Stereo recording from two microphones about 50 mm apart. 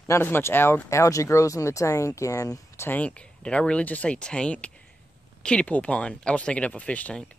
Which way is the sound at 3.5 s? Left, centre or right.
Left.